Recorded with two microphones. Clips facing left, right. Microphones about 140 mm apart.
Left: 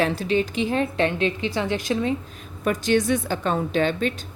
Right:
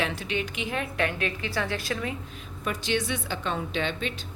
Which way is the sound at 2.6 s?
45° left (ahead or behind).